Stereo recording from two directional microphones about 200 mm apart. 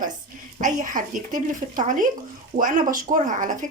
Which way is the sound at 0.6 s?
40° right (ahead or behind).